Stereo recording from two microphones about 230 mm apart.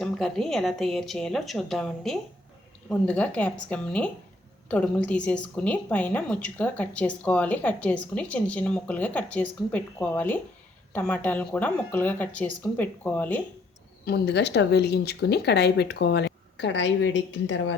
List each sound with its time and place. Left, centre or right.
0.0 s a woman's voice: centre
14.0 s a woman's voice: left